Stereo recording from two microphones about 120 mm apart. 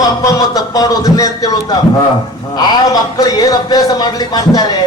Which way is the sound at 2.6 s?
35° left (ahead or behind).